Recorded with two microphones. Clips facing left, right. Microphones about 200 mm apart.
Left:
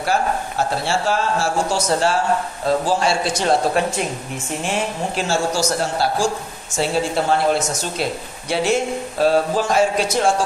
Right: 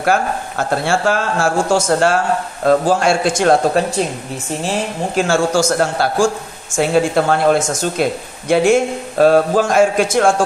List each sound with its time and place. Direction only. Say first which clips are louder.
0.0 s a man's voice: right 3 dB; 55° right (ahead or behind)
4.6 s speech: right 2 dB; 35° right (ahead or behind)
5.2 s a man's voice: right 6 dB; 50° right (ahead or behind)